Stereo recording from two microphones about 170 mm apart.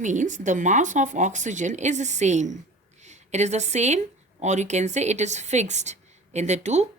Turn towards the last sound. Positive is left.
turn(degrees=-40)  # may be behind; listen again after turning